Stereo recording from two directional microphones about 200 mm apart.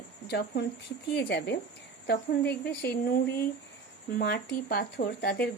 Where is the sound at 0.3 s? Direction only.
55° left (ahead or behind).